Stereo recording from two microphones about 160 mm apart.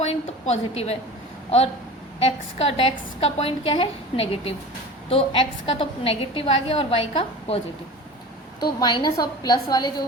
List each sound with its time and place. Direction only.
0.0 s a woman's voice: 40° left (ahead or behind)
8.8 s a woman's voice: 25° left (ahead or behind)